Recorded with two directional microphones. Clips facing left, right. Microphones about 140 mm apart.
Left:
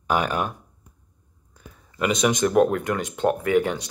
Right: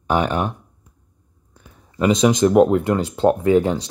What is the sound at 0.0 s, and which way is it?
Speech, 25° right (ahead or behind).